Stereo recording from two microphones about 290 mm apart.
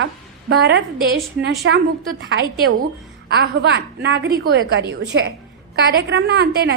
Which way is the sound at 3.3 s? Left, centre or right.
Right.